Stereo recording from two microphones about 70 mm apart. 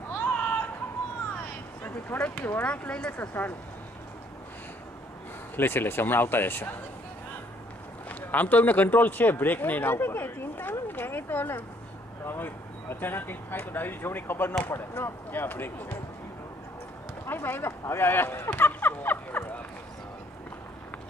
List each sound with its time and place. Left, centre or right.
0.1 s a sound: left
2.0 s a man's voice: left
2.6 s speech: centre
3.2 s a man's voice: left
5.6 s speech: left
8.1 s a man's voice: left
17.3 s speech: left